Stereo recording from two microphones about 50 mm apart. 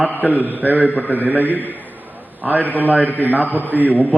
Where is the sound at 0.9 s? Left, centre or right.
Left.